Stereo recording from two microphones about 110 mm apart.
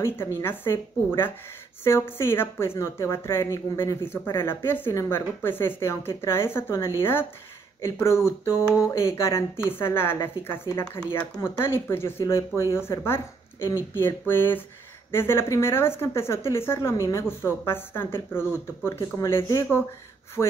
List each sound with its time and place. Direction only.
0.4 s speech: 20° left (ahead or behind)
20.4 s speech: 5° right (ahead or behind)